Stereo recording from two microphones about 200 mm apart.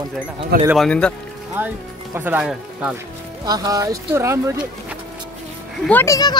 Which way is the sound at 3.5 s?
20° right (ahead or behind).